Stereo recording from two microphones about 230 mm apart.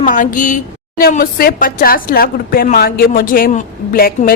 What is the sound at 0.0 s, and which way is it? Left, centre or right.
A woman's voice, left.